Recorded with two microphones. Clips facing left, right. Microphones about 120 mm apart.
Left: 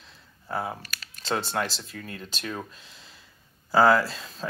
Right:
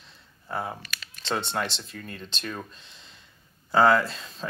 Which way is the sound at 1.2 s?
5° left (ahead or behind).